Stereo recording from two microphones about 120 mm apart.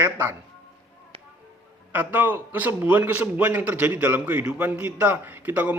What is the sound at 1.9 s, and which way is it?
A man's voice, 15° right (ahead or behind).